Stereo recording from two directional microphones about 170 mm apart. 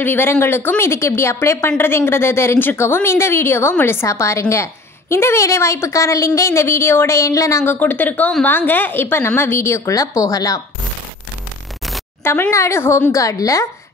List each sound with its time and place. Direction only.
0.0 s a woman's voice: 10° left (ahead or behind)
12.2 s a woman's voice: 15° left (ahead or behind)